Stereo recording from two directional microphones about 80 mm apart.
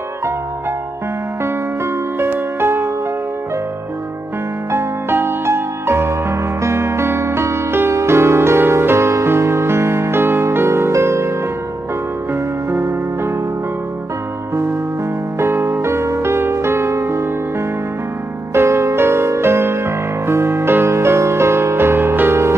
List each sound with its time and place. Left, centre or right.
2.2 s music: right
4.6 s music: right
12.6 s music: right
15.3 s music: right
18.5 s music: right